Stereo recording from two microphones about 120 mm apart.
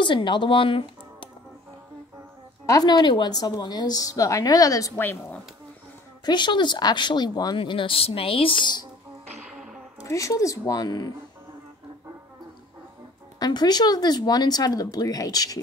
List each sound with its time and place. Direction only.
0.0 s speech: 40° left (ahead or behind)
2.6 s speech: 30° left (ahead or behind)
6.2 s speech: 40° left (ahead or behind)
9.4 s music: 5° right (ahead or behind)
10.0 s speech: 25° left (ahead or behind)
13.4 s speech: 35° left (ahead or behind)